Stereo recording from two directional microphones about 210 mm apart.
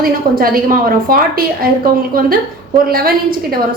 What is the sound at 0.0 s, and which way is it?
A woman's voice, 45° right (ahead or behind).